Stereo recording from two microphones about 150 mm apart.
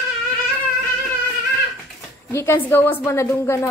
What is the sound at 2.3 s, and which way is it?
A woman's voice, 15° left (ahead or behind).